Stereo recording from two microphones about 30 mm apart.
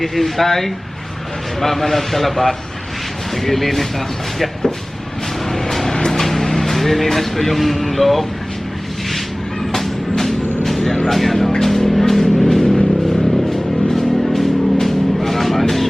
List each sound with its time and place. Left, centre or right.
0.0 s a man's voice: centre
5.5 s music: centre
6.1 s speech: centre
9.7 s music: centre
11.0 s speech: centre
11.6 s music: centre